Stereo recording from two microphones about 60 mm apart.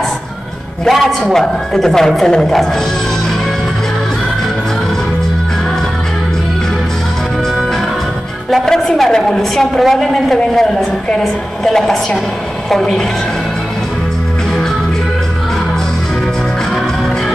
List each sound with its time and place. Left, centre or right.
0.8 s a woman's voice: centre
8.6 s a woman's voice: centre